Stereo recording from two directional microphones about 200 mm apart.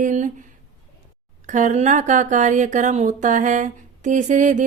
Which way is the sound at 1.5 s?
40° right (ahead or behind).